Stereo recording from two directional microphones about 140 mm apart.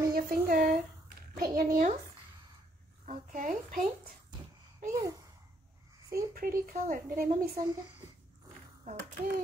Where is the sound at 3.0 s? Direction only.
65° right (ahead or behind); by 4.2 s 80° right.